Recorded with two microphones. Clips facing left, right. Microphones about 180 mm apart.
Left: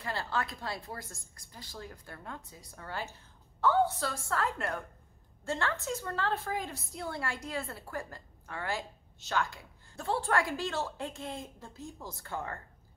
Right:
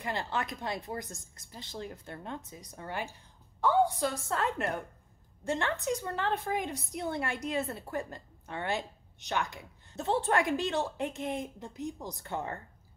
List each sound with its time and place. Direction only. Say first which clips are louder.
0.0 s a woman's voice: right 1 dB; 20° right (ahead or behind)